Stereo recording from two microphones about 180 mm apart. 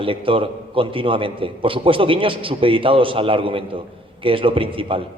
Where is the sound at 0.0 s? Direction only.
30° right (ahead or behind).